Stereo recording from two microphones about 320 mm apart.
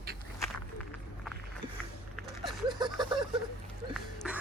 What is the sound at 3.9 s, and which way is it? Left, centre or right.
Music, centre.